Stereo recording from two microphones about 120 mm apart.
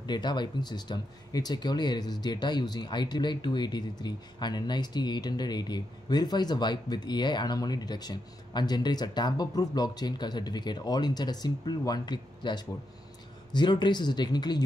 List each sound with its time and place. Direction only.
0.0 s speech: 35° left (ahead or behind)